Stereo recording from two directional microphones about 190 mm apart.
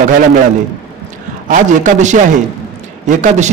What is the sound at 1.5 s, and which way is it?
A man's voice, 40° right (ahead or behind).